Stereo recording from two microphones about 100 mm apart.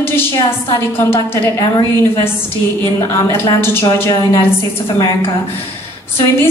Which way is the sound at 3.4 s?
25° left (ahead or behind).